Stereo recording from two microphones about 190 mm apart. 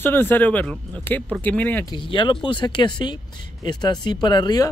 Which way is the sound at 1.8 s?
25° left (ahead or behind).